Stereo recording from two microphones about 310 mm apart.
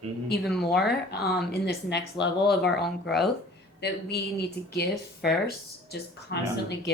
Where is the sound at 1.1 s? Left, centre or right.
Left.